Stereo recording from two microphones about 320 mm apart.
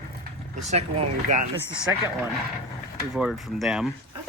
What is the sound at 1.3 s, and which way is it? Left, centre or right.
Speech, centre.